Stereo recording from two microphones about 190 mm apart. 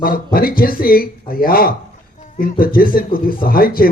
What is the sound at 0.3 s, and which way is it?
Speech, 50° left (ahead or behind).